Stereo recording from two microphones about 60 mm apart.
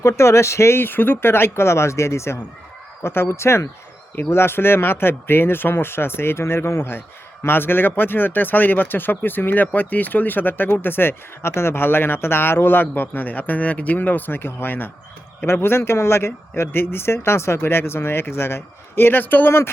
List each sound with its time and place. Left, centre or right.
0.1 s speech: left